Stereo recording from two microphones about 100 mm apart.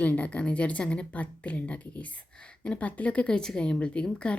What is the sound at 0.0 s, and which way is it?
A woman's voice, 15° left (ahead or behind).